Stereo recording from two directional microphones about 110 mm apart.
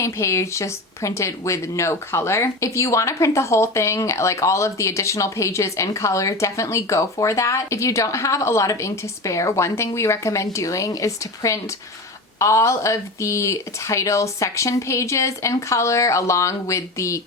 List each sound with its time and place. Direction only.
0.0 s speech: 25° left (ahead or behind)